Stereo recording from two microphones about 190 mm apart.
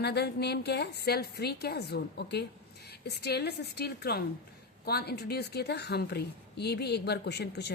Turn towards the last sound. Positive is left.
turn(degrees=60)  # may be behind; listen again after turning